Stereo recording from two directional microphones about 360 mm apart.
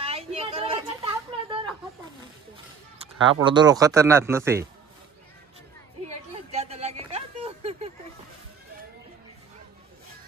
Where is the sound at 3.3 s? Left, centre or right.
Centre.